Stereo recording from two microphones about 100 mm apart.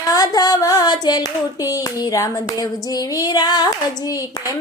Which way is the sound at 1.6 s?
35° left (ahead or behind).